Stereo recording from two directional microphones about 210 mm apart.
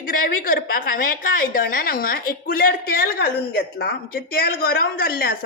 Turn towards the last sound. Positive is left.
turn(degrees=45)  # may be behind; listen again after turning